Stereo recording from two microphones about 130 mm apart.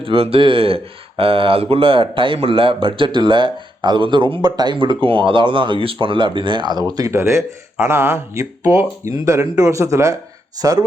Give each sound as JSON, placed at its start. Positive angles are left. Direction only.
{"t": 0.0, "sound": "speech", "side_deg": -45}
{"t": 6.9, "sound": "speech", "side_deg": -25}